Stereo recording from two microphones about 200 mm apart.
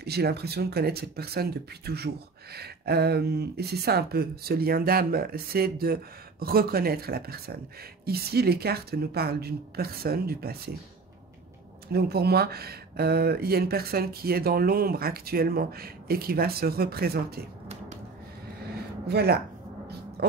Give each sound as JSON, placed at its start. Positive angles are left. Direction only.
{"t": 0.0, "sound": "speech", "side_deg": -55}
{"t": 11.9, "sound": "speech", "side_deg": -50}
{"t": 19.0, "sound": "speech", "side_deg": -55}
{"t": 20.2, "sound": "a sound", "side_deg": -55}